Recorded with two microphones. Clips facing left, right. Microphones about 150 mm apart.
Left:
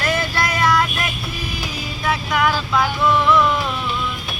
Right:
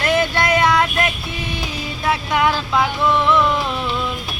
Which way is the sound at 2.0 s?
25° right (ahead or behind).